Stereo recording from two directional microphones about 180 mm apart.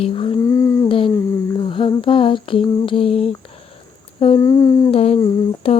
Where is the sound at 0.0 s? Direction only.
30° left (ahead or behind).